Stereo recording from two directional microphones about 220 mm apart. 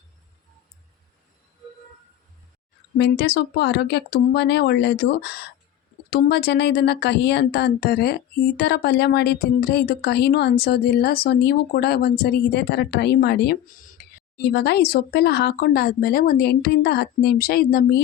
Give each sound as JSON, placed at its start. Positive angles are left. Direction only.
{"t": 3.0, "sound": "speech", "side_deg": 45}